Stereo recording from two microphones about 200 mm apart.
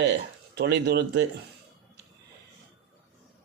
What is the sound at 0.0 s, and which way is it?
Speech, 60° right (ahead or behind).